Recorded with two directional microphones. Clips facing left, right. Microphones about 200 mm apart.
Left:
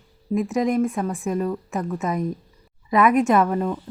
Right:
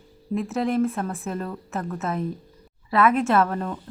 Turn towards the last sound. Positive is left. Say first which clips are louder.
# left 3 dB
turn(degrees=10)  # may be behind; listen again after turning